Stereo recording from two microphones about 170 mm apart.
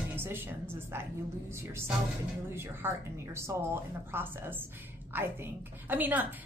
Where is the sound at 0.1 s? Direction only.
15° right (ahead or behind).